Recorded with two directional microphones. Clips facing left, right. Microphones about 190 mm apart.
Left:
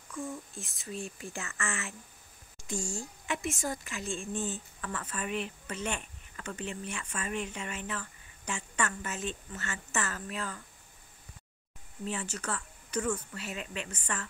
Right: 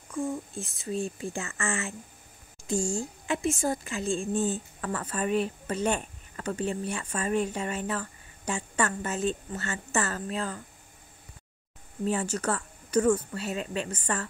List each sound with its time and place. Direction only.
0.1 s a sound: 40° right (ahead or behind)
0.8 s a woman's voice: 30° right (ahead or behind)
12.0 s a woman's voice: 40° right (ahead or behind)